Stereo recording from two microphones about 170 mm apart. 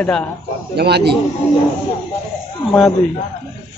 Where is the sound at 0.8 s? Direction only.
75° right (ahead or behind).